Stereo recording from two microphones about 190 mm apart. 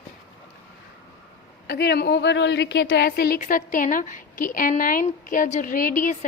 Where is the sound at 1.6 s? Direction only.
60° left (ahead or behind).